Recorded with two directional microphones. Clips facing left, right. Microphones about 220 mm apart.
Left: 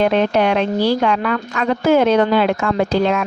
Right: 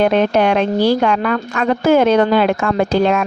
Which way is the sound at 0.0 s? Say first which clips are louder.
Right 2 dB; 50° right (ahead or behind).